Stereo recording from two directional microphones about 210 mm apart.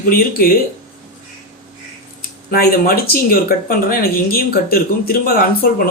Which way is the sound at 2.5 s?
45° left (ahead or behind).